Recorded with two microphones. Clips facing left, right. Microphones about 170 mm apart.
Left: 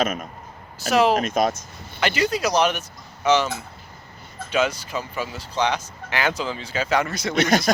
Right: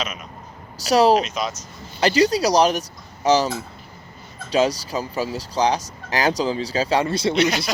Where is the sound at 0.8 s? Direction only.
35° right (ahead or behind).